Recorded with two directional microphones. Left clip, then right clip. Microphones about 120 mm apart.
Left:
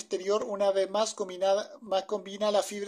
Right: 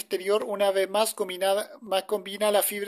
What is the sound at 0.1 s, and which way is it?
Speech, 15° right (ahead or behind).